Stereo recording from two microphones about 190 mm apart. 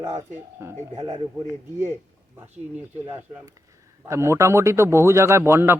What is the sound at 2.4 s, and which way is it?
A man's voice, 10° right (ahead or behind).